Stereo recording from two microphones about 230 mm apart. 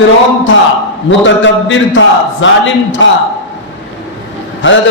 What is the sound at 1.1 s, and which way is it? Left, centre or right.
A man's voice, left.